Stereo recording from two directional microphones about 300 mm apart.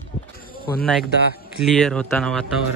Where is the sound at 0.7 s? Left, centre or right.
Centre.